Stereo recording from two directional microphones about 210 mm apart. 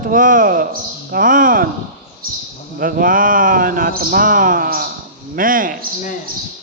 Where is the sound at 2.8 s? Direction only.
40° right (ahead or behind).